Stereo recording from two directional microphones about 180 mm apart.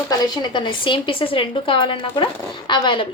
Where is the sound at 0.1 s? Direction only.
25° left (ahead or behind).